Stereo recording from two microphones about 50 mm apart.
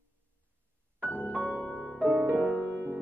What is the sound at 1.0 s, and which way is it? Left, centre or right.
Music, left.